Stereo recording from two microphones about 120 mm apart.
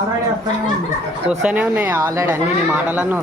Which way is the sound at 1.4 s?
10° right (ahead or behind).